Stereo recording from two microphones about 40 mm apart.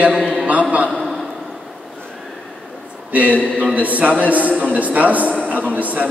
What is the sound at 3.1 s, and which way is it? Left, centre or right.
A man's voice, right.